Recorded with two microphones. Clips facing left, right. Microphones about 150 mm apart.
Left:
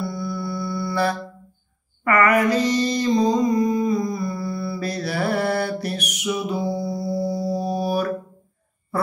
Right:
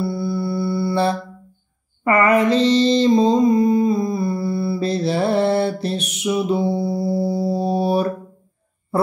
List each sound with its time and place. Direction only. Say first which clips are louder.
0.0 s music: right 5 dB; 30° right (ahead or behind)
2.0 s mantra: right 3 dB; 25° right (ahead or behind)